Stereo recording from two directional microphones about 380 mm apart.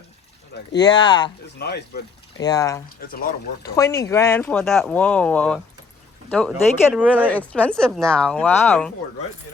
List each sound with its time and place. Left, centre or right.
0.8 s speech: centre
1.5 s speech: left
2.4 s speech: centre
3.1 s speech: left
3.6 s speech: centre